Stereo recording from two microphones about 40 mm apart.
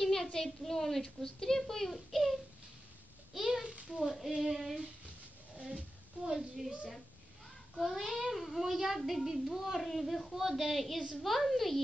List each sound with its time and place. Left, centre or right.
0.0 s a woman's voice: centre
3.3 s child singing: centre
4.1 s a child's voice: centre
5.6 s speech: right
6.2 s a woman's voice: centre
7.7 s a child's voice: centre